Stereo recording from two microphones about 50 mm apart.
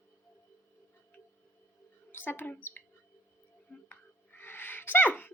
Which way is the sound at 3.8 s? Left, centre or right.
Left.